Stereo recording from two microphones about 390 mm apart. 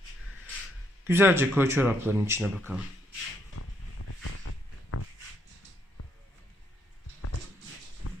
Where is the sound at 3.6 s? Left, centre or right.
Left.